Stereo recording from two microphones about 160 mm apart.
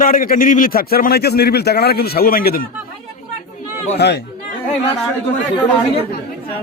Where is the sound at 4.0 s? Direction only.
90° left.